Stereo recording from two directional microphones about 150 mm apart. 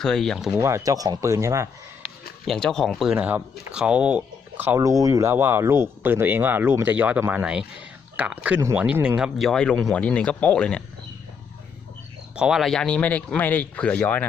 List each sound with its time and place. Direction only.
0.0 s speech: 5° left (ahead or behind)
0.6 s speech: 20° right (ahead or behind)
2.5 s speech: 5° left (ahead or behind)
3.2 s speech: 10° right (ahead or behind); by 10.8 s 5° left (ahead or behind)
12.4 s speech: 5° right (ahead or behind)